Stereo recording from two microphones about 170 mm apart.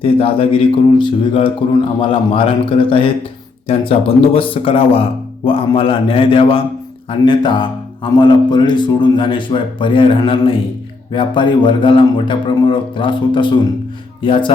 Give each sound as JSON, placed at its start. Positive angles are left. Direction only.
{"t": 0.0, "sound": "speech", "side_deg": 35}